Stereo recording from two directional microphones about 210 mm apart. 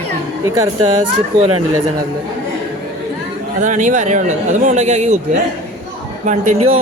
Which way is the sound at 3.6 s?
35° right (ahead or behind).